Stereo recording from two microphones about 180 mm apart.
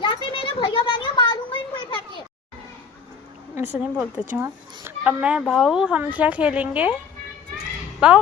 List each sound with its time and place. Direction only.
0.0 s a sound: 30° left (ahead or behind)
3.5 s a child's voice: 10° right (ahead or behind)
8.0 s a child's voice: 5° right (ahead or behind)